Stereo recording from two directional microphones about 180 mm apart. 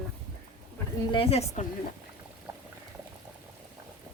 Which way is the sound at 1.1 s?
30° left (ahead or behind).